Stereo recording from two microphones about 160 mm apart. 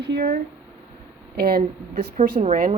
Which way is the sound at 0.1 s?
90° right.